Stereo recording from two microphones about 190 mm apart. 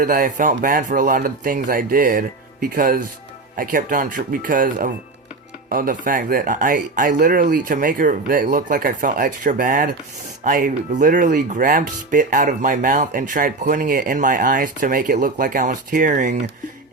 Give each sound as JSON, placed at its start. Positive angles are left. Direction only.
{"t": 0.0, "sound": "speech", "side_deg": -45}